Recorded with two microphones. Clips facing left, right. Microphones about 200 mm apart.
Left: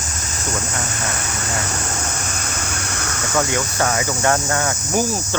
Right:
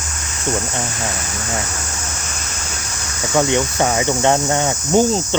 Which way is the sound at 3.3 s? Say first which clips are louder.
Right 4 dB; 20° right (ahead or behind).